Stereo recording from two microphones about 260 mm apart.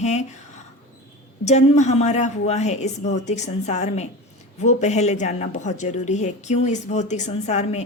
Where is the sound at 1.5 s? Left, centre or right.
Left.